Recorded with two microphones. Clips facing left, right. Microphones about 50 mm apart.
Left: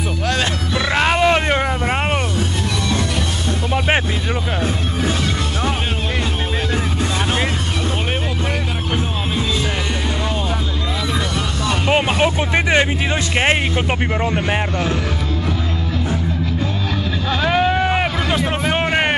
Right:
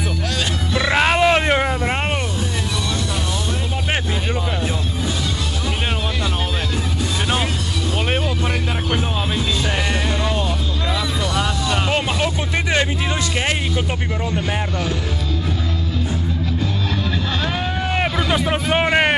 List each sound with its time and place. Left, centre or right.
0.7 s roaring cats: centre
11.9 s vehicle: left
13.4 s music: left
17.5 s boat: left
18.5 s music: centre